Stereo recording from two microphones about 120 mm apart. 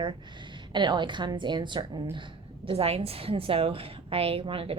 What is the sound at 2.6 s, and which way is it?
A woman's voice, 55° right (ahead or behind).